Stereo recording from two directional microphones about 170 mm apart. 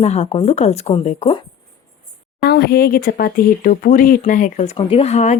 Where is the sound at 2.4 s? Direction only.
70° left (ahead or behind); by 4.7 s 50° left (ahead or behind).